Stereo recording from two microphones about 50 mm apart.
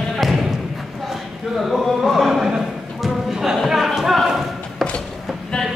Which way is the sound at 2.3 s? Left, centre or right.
Centre.